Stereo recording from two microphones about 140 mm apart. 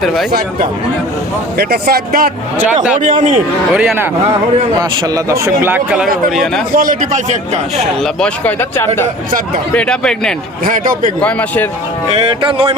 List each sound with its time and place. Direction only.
1.5 s speech: 90° right
2.9 s a man's voice: 60° right (ahead or behind)
3.7 s speech: 5° right (ahead or behind)
4.8 s speech: 25° right (ahead or behind); by 6.5 s centre (ahead or behind)
6.7 s a man's voice: 70° right (ahead or behind)
8.0 s speech: 5° left (ahead or behind)
9.7 s speech: 5° left (ahead or behind)
10.7 s a man's voice: 70° right (ahead or behind)
11.2 s speech: 10° left (ahead or behind)
12.0 s speech: 45° right (ahead or behind)